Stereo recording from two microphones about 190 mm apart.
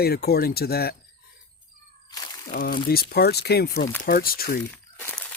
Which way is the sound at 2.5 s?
50° left (ahead or behind).